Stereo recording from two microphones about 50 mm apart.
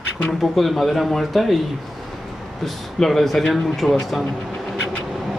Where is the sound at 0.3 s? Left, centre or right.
Centre.